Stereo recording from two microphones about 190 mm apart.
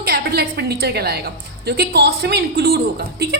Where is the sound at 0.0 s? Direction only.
55° right (ahead or behind).